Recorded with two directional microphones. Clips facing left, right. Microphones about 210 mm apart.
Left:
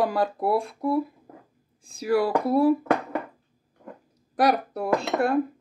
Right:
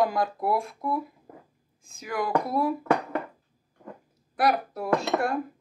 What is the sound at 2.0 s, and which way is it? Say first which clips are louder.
Speech: left 8 dB; 30° left (ahead or behind).